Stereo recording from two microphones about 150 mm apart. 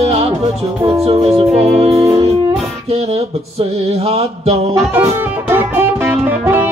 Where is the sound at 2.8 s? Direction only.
45° right (ahead or behind).